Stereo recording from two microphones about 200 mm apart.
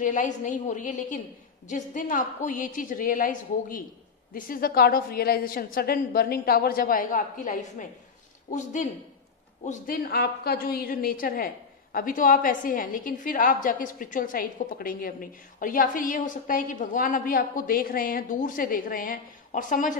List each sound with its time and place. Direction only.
0.0 s a woman's voice: 40° left (ahead or behind)
9.7 s a woman's voice: 50° left (ahead or behind)